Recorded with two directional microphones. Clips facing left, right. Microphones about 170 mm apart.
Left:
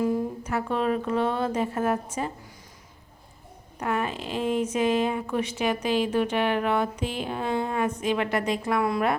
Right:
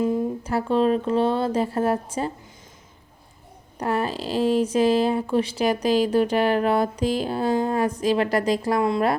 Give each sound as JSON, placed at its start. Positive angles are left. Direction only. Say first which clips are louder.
{"t": 0.0, "sound": "speech", "louder": "right 3 dB", "side_deg": -25}
{"t": 3.8, "sound": "speech", "louder": "right 3 dB", "side_deg": -35}